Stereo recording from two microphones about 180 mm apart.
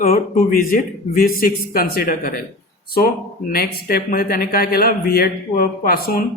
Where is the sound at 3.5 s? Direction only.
55° left (ahead or behind).